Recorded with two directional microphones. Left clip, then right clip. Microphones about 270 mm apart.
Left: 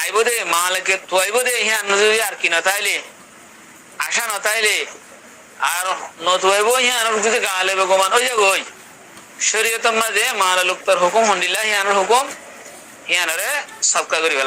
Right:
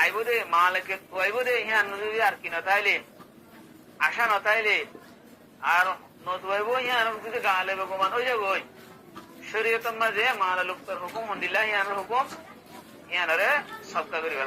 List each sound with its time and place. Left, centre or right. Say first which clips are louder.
0.0 s a man's voice: left 6 dB; left